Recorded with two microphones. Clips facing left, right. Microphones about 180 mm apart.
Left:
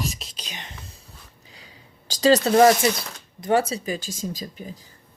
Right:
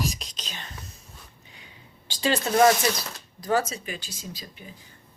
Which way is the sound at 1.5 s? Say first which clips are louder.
Left 3 dB; 40° left (ahead or behind).